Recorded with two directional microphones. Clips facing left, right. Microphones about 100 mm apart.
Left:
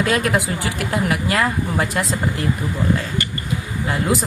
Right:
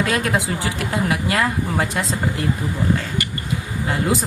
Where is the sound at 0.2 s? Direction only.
30° right (ahead or behind).